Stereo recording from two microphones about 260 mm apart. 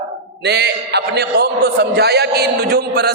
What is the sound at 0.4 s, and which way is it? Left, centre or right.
A man's voice, right.